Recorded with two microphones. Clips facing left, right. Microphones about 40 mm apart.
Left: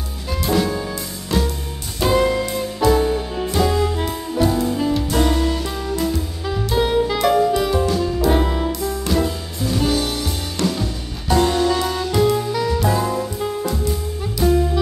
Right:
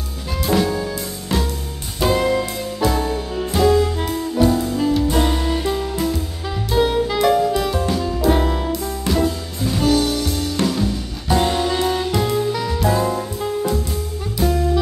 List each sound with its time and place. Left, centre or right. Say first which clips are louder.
0.3 s jazz: right 1 dB; centre
1.3 s music: left 1 dB; centre
2.0 s music: even; centre
5.1 s music: left 1 dB; centre
6.1 s music: left 2 dB; centre
10.6 s music: even; right
12.1 s music: left 2 dB; centre